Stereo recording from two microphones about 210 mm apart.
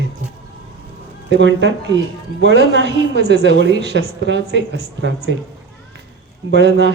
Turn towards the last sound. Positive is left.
turn(degrees=-55)  # may be behind; listen again after turning